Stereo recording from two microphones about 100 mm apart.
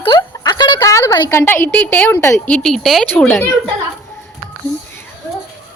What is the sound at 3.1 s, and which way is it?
Speech, 15° left (ahead or behind).